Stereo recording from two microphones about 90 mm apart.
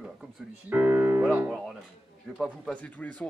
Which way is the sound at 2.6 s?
15° left (ahead or behind).